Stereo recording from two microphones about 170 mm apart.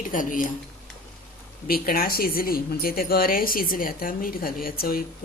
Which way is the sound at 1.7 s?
60° left (ahead or behind).